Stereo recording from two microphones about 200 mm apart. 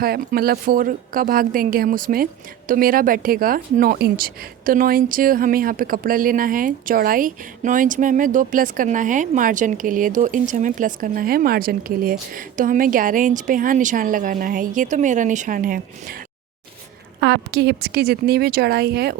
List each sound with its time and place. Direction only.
0.0 s speech: 50° right (ahead or behind)
17.2 s speech: 60° right (ahead or behind)